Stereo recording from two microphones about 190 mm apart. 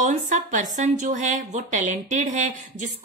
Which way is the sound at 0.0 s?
40° right (ahead or behind).